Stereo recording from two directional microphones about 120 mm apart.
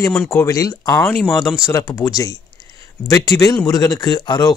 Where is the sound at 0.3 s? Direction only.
25° left (ahead or behind).